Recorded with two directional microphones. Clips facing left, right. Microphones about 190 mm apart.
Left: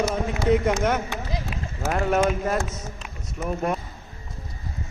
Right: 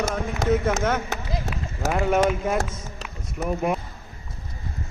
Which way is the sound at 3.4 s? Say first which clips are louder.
Right 2 dB; 5° right (ahead or behind).